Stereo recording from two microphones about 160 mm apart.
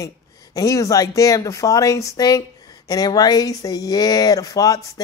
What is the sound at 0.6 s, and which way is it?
Speech, 20° left (ahead or behind).